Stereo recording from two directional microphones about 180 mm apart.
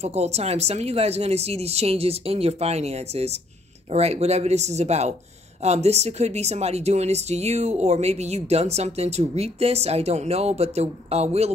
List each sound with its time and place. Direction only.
0.0 s speech: 35° right (ahead or behind)